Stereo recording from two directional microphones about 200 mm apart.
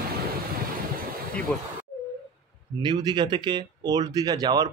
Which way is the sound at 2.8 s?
20° right (ahead or behind).